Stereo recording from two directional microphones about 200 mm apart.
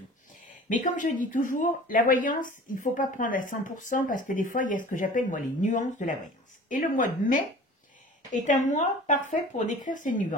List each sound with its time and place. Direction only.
0.7 s speech: 40° left (ahead or behind)